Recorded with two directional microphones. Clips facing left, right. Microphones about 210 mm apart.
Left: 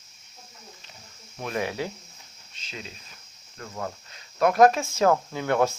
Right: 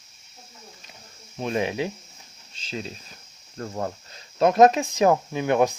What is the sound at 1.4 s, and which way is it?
Speech, 20° right (ahead or behind).